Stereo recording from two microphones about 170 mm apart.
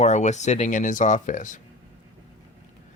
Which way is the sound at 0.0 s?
45° left (ahead or behind).